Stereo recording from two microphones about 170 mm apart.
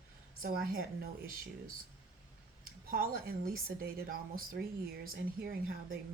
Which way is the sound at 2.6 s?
60° right (ahead or behind).